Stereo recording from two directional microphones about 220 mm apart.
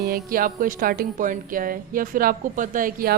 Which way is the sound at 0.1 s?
40° right (ahead or behind).